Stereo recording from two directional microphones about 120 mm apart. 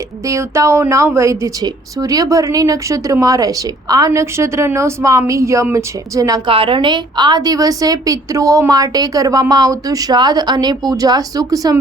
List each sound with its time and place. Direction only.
0.3 s speech: 25° right (ahead or behind)
6.5 s a woman's voice: 45° right (ahead or behind); by 11.8 s 30° right (ahead or behind)